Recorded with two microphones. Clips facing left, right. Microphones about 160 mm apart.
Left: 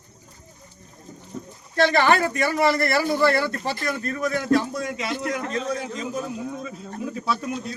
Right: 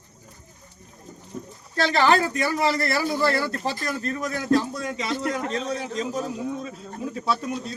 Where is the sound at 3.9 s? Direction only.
35° right (ahead or behind).